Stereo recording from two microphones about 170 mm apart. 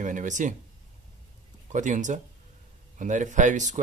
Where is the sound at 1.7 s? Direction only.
45° right (ahead or behind).